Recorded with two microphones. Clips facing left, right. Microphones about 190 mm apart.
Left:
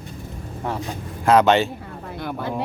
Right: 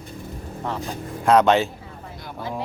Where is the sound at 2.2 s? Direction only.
60° left (ahead or behind).